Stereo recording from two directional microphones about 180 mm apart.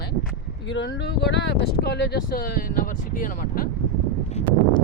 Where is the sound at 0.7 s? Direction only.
80° left; by 3.7 s 50° left (ahead or behind).